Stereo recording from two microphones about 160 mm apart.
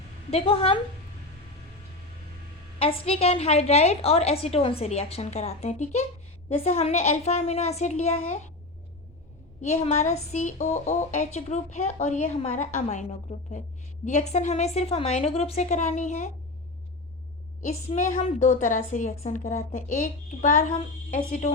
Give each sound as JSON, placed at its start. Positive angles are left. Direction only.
{"t": 0.3, "sound": "a woman's voice", "side_deg": 35}
{"t": 2.7, "sound": "a woman's voice", "side_deg": 35}
{"t": 9.6, "sound": "a woman's voice", "side_deg": 45}
{"t": 17.6, "sound": "a woman's voice", "side_deg": 45}